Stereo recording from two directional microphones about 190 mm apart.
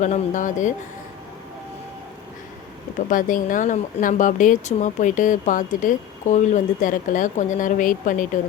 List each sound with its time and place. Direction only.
0.0 s speech: 40° left (ahead or behind)
3.1 s speech: 45° left (ahead or behind)